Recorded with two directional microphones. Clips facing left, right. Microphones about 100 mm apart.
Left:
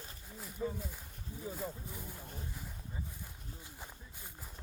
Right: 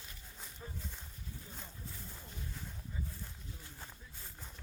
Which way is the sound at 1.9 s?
15° left (ahead or behind).